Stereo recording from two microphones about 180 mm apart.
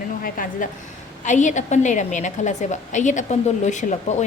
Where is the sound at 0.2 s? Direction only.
50° left (ahead or behind).